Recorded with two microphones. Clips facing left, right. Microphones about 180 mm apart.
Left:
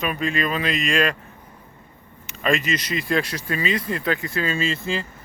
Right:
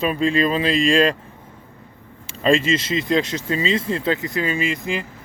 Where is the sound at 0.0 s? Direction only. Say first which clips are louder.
Right 5 dB; 30° right (ahead or behind).